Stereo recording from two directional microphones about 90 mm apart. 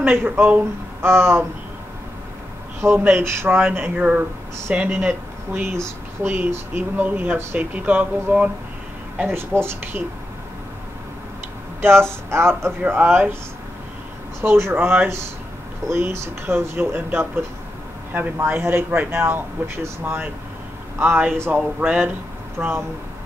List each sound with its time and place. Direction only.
0.0 s speech: 20° right (ahead or behind)
3.0 s speech: 25° right (ahead or behind)
9.3 s speech: 25° right (ahead or behind)
11.8 s speech: 25° right (ahead or behind)
12.8 s speech: 15° right (ahead or behind)
14.4 s speech: 25° right (ahead or behind)
18.5 s speech: 25° right (ahead or behind)